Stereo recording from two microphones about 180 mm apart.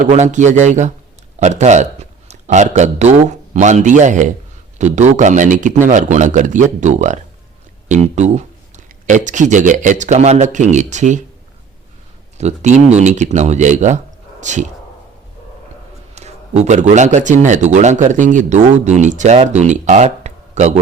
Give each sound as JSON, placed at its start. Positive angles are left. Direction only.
{"t": 0.1, "sound": "a man's voice", "side_deg": -40}
{"t": 12.4, "sound": "a man's voice", "side_deg": -40}
{"t": 16.1, "sound": "a man's voice", "side_deg": -40}